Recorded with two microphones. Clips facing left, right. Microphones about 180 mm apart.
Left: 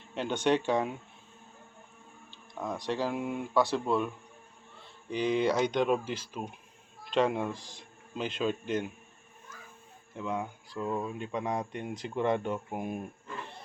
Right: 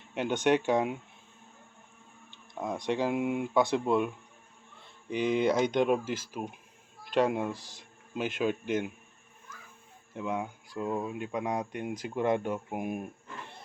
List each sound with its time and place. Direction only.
0.1 s speech: 15° right (ahead or behind)
2.6 s speech: 15° right (ahead or behind)
5.1 s speech: 50° right (ahead or behind)
5.4 s speech: 10° right (ahead or behind)
10.2 s speech: 10° right (ahead or behind)